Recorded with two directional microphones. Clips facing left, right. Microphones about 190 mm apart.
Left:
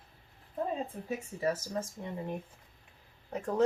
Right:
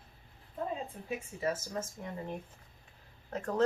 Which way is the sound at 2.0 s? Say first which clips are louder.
Left 2 dB; 20° left (ahead or behind).